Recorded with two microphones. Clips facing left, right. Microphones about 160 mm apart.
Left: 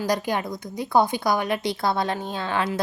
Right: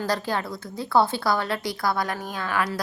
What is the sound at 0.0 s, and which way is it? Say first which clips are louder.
A woman's voice: left 2 dB; 15° left (ahead or behind).